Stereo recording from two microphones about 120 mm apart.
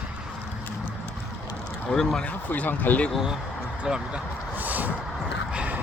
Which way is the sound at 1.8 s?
5° left (ahead or behind).